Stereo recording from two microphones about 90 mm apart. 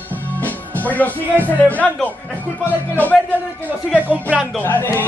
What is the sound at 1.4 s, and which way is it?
Speech, 15° left (ahead or behind).